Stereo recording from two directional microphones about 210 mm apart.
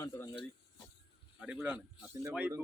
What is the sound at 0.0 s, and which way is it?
Speech, 15° left (ahead or behind).